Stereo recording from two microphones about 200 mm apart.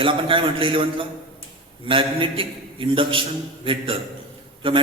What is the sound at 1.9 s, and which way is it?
A man's voice, 25° right (ahead or behind).